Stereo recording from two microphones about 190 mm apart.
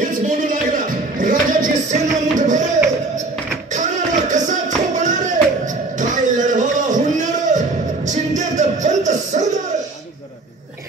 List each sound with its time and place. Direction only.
0.0 s music: 45° right (ahead or behind)
3.7 s music: 40° right (ahead or behind)